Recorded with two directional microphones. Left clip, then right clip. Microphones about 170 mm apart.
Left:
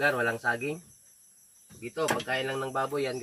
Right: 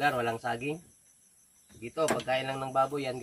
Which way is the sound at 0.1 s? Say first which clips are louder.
Left 3 dB; 20° right (ahead or behind).